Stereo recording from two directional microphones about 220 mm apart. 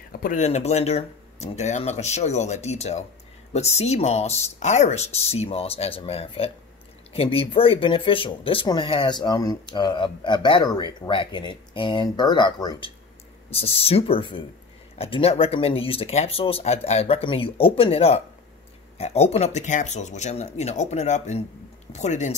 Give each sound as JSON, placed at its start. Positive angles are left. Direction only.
{"t": 0.1, "sound": "speech", "side_deg": 40}